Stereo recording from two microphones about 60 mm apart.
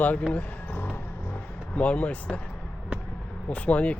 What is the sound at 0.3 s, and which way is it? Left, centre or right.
Basketball bounce, left.